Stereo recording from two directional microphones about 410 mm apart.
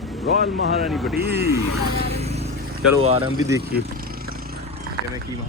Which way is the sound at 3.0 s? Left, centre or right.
Centre.